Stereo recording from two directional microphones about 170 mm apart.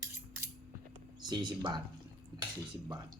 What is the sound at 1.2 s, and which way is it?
Speech, 25° right (ahead or behind).